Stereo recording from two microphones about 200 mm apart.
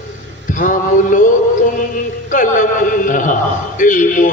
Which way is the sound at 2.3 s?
40° left (ahead or behind).